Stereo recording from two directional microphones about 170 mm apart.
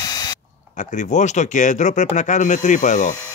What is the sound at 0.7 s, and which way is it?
Speech, 45° left (ahead or behind).